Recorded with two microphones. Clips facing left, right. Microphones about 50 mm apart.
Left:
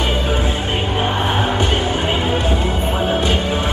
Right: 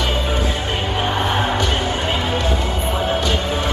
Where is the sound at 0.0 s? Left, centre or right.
Left.